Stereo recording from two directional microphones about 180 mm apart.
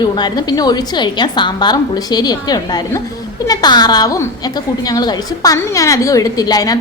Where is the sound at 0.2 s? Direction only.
25° left (ahead or behind).